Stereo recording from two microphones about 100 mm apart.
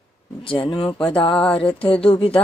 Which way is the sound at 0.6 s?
60° left (ahead or behind).